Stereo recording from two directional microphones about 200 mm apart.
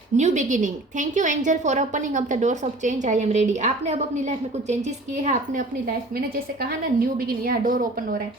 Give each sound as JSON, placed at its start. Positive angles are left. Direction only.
{"t": 0.2, "sound": "a woman's voice", "side_deg": -35}
{"t": 6.1, "sound": "a woman's voice", "side_deg": -50}